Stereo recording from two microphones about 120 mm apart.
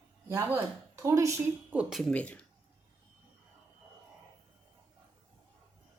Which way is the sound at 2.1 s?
10° left (ahead or behind).